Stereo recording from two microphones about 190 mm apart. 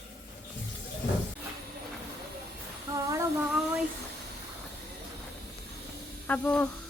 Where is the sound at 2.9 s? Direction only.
15° right (ahead or behind).